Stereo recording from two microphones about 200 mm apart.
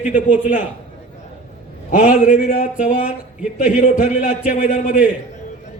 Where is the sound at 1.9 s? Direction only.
40° left (ahead or behind).